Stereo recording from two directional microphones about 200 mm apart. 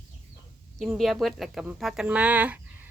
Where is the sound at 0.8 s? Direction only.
Centre (ahead or behind).